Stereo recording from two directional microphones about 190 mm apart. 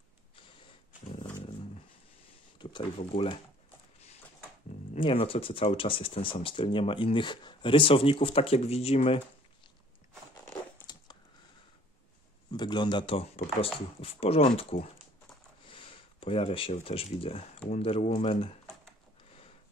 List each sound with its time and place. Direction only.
2.6 s speech: 25° left (ahead or behind)
4.9 s speech: 30° left (ahead or behind)
12.4 s speech: 20° left (ahead or behind)